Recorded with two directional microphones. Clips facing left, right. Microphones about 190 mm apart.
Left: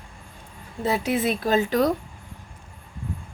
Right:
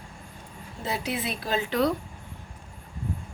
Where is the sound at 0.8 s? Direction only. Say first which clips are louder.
Left 7 dB; 50° left (ahead or behind).